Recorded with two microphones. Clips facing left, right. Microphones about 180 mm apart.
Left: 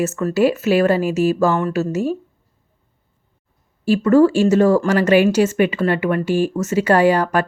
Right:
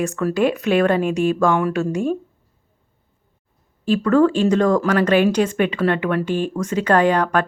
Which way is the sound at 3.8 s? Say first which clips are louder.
Left 3 dB; 10° left (ahead or behind).